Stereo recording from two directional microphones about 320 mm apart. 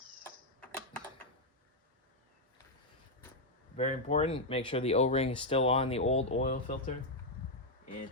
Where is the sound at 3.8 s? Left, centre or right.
Left.